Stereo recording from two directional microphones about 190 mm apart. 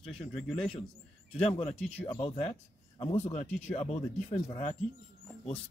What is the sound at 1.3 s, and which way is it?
Speech, 30° left (ahead or behind).